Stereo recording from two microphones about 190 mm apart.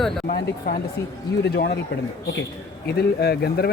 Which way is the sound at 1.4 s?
60° left (ahead or behind).